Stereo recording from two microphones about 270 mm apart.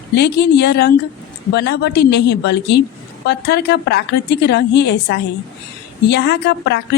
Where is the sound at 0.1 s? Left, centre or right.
Left.